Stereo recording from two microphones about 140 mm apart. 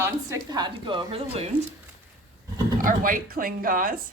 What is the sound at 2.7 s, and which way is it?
Speech, 75° right (ahead or behind).